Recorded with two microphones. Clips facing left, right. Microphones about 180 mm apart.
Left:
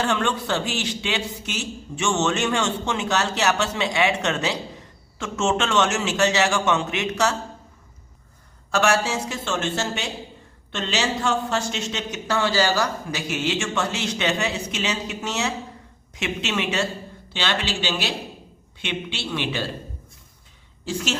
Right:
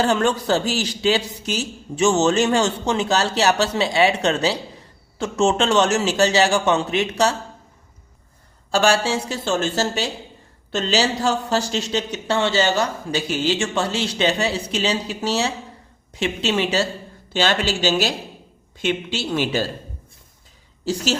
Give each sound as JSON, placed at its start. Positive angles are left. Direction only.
{"t": 0.0, "sound": "a man's voice", "side_deg": -40}
{"t": 8.7, "sound": "a man's voice", "side_deg": -30}
{"t": 20.8, "sound": "a man's voice", "side_deg": -35}